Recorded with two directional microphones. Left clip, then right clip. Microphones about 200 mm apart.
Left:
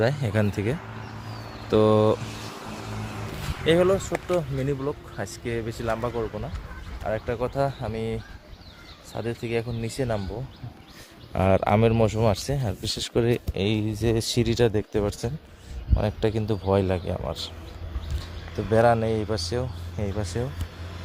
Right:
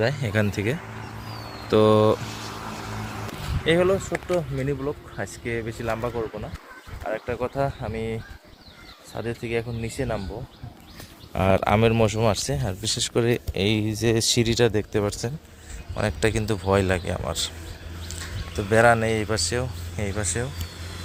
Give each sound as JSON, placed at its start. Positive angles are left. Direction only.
{"t": 0.0, "sound": "speech", "side_deg": 20}
{"t": 0.8, "sound": "a sound", "side_deg": -45}
{"t": 1.5, "sound": "a sound", "side_deg": -30}
{"t": 1.7, "sound": "speech", "side_deg": 0}
{"t": 2.1, "sound": "vehicle", "side_deg": -25}
{"t": 3.8, "sound": "speech", "side_deg": 10}